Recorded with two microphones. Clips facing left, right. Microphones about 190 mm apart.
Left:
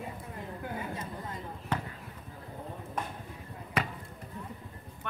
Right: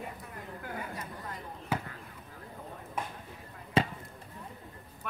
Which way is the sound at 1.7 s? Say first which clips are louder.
Even; 10° right (ahead or behind).